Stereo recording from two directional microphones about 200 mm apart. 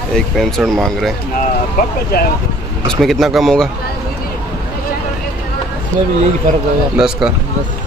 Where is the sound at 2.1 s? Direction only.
50° left (ahead or behind).